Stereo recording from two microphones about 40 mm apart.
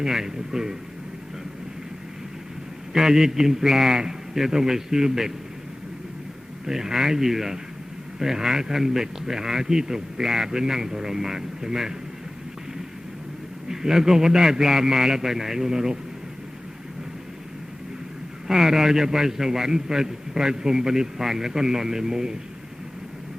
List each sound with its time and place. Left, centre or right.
0.0 s a man's voice: centre
2.9 s a man's voice: centre
6.7 s a man's voice: centre
13.7 s a man's voice: centre
18.4 s a man's voice: centre